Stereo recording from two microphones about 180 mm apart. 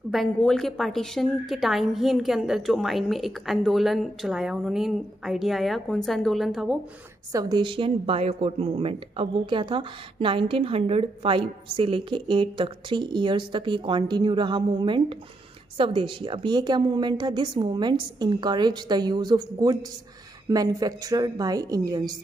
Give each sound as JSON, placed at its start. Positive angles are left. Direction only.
{"t": 0.1, "sound": "a woman's voice", "side_deg": 0}
{"t": 7.3, "sound": "speech", "side_deg": -25}